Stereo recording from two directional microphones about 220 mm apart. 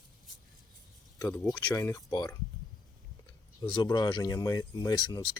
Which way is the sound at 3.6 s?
20° left (ahead or behind).